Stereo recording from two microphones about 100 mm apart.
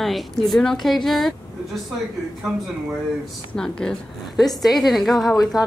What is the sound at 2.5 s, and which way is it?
Speech, 5° right (ahead or behind).